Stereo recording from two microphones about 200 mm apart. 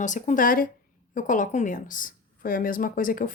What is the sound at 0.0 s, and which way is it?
A woman's voice, 40° left (ahead or behind).